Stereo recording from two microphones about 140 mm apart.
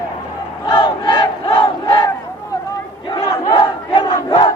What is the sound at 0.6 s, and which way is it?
Battle cry, 30° left (ahead or behind).